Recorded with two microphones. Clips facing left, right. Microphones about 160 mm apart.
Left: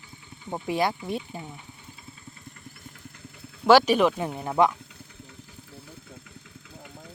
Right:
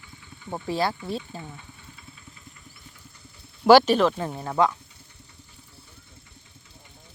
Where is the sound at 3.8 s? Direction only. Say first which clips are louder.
Even; 10° left (ahead or behind).